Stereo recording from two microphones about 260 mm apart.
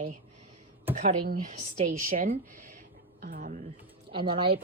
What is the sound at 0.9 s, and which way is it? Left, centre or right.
Speech, right.